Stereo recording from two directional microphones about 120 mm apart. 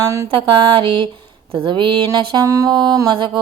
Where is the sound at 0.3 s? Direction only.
45° right (ahead or behind).